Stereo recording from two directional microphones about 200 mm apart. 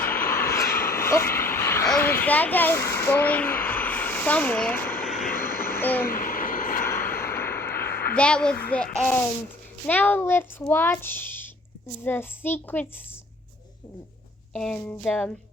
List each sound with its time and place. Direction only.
0.3 s vehicle: 15° left (ahead or behind)
1.9 s speech: 10° left (ahead or behind)
5.1 s vehicle: 45° left (ahead or behind)
7.3 s vehicle: 10° left (ahead or behind)
7.9 s a sound: 50° left (ahead or behind)
8.1 s a child's voice: 5° left (ahead or behind)
14.5 s a child's voice: 5° left (ahead or behind)